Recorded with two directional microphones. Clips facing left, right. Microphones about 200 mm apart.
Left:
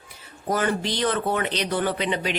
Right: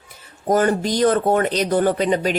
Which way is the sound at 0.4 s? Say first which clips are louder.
Right 7 dB; 45° right (ahead or behind).